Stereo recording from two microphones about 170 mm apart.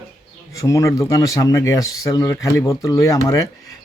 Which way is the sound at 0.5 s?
20° left (ahead or behind).